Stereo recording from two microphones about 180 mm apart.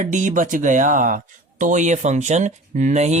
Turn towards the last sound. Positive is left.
turn(degrees=-40)  # may be behind; listen again after turning